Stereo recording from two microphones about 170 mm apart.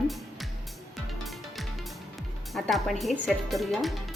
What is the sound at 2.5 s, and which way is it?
A woman's voice, centre (ahead or behind).